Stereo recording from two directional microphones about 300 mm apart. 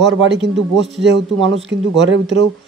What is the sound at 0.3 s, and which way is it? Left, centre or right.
Speech, right.